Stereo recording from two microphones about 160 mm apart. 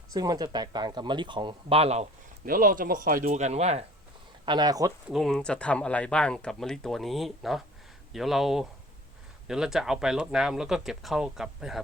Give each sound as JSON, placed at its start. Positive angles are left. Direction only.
{"t": 0.1, "sound": "speech", "side_deg": -25}
{"t": 2.5, "sound": "speech", "side_deg": -60}
{"t": 3.2, "sound": "speech", "side_deg": -45}
{"t": 4.4, "sound": "speech", "side_deg": -25}
{"t": 5.0, "sound": "speech", "side_deg": 0}